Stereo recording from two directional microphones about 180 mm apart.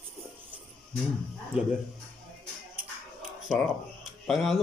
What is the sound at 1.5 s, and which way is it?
Speech, 5° right (ahead or behind).